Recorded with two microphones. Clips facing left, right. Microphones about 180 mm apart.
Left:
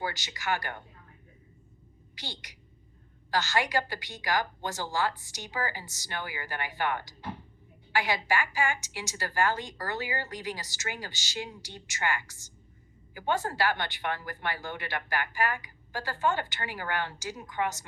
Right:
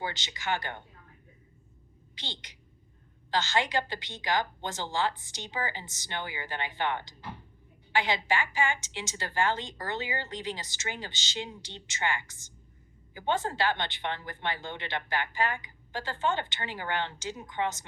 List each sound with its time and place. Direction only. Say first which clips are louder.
0.0 s a woman's voice: left 1 dB; 20° right (ahead or behind)
2.1 s a woman's voice: left 1 dB; 20° right (ahead or behind)